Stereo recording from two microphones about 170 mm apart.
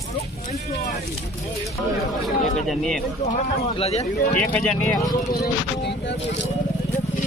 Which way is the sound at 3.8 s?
40° left (ahead or behind).